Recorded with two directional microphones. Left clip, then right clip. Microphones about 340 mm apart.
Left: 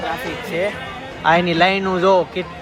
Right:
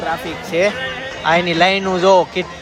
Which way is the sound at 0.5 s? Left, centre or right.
Centre.